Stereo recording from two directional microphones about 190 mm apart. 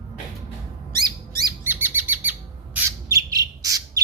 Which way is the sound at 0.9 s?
20° right (ahead or behind).